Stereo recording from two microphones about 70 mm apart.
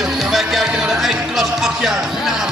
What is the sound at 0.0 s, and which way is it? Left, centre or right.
Music, centre.